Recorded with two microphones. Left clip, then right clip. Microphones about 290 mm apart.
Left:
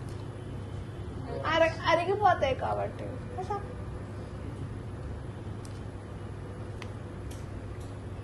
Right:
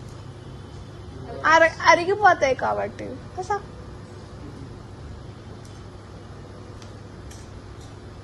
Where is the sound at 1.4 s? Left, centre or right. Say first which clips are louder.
Right 10 dB; right.